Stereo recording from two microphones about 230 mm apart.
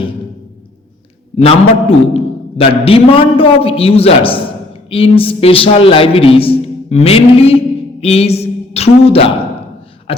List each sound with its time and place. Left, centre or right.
1.4 s a man's voice: left
10.1 s beatboxing: left